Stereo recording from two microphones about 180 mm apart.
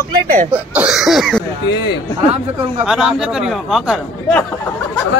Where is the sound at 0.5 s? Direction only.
10° right (ahead or behind).